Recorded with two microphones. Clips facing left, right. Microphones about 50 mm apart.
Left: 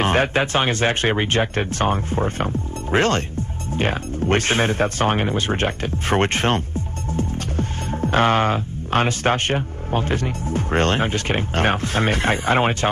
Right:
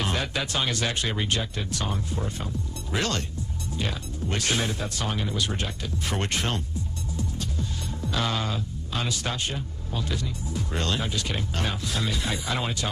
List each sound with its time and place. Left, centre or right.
0.0 s speech: left